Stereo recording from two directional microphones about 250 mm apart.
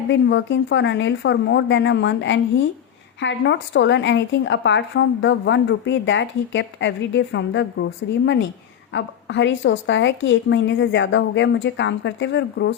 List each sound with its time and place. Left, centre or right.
0.1 s speech: left